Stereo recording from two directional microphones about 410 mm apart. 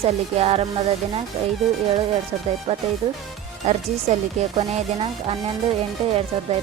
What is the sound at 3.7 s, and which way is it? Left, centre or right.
Speech, centre.